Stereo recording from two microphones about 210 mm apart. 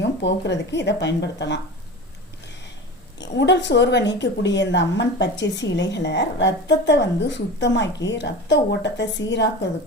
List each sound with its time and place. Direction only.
0.0 s a woman's voice: 55° left (ahead or behind)
3.2 s a woman's voice: 55° left (ahead or behind)